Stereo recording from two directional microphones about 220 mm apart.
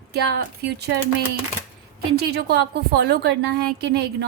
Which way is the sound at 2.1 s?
45° right (ahead or behind).